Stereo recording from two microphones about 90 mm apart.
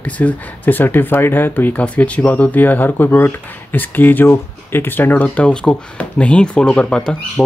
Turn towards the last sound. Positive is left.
turn(degrees=10)  # may be behind; listen again after turning